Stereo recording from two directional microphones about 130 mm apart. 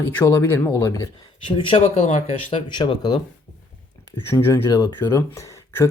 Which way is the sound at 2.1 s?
55° left (ahead or behind).